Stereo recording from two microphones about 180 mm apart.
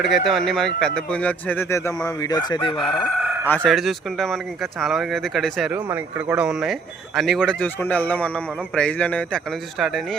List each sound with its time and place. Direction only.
0.0 s speech: centre (ahead or behind)
2.0 s chicken: 20° left (ahead or behind)
3.4 s speech: 10° left (ahead or behind)
3.7 s speech: centre (ahead or behind)